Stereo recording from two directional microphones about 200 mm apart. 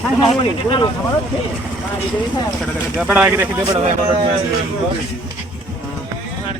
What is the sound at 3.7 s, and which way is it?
Speech, 25° right (ahead or behind).